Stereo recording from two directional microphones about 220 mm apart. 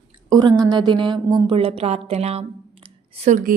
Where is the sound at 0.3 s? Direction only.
15° right (ahead or behind).